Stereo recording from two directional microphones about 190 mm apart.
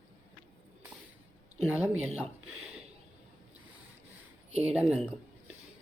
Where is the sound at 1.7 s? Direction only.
10° right (ahead or behind).